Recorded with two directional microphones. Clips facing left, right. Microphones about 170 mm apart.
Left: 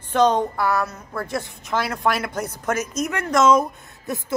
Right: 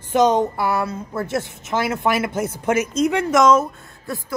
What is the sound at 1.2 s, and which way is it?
Speech, 20° right (ahead or behind).